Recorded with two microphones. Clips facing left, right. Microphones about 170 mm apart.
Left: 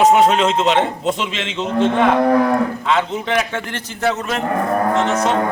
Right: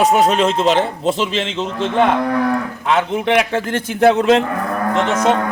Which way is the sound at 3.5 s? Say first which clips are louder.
Right 6 dB; 50° right (ahead or behind).